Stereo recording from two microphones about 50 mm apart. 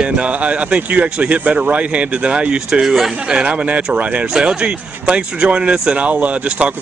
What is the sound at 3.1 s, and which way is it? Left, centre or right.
Speech, right.